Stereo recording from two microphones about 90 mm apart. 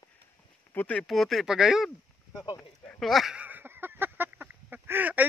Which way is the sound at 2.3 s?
40° left (ahead or behind).